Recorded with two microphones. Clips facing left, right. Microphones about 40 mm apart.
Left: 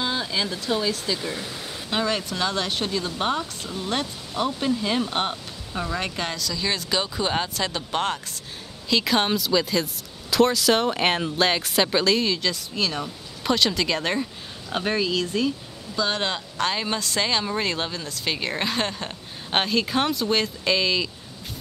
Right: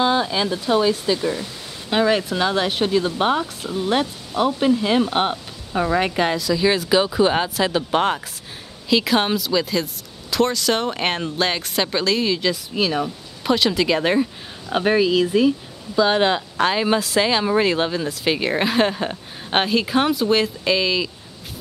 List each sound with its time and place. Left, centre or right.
0.0 s speech: centre